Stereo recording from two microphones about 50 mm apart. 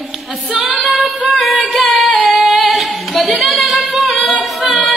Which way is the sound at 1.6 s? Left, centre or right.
Centre.